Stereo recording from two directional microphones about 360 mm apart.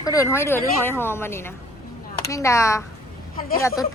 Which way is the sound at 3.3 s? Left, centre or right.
Left.